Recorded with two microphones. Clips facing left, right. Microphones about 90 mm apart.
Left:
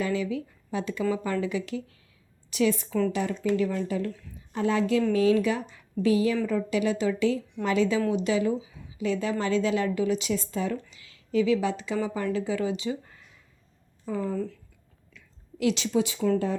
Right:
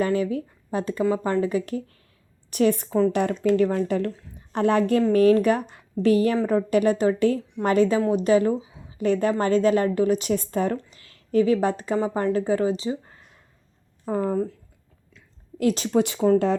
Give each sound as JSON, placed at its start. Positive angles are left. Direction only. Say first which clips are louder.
{"t": 0.0, "sound": "a woman's voice", "louder": "right 5 dB", "side_deg": -45}
{"t": 14.0, "sound": "speech", "louder": "right 5 dB", "side_deg": -50}
{"t": 15.1, "sound": "a sound", "louder": "right 4 dB", "side_deg": -45}